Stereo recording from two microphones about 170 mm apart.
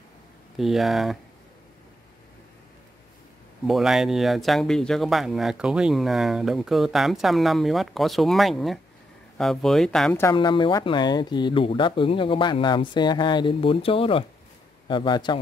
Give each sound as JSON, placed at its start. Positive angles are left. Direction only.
{"t": 0.6, "sound": "speech", "side_deg": 0}
{"t": 3.6, "sound": "speech", "side_deg": 0}
{"t": 10.3, "sound": "speech", "side_deg": 30}